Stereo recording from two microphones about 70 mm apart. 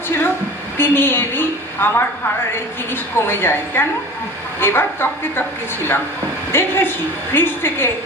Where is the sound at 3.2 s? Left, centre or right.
Left.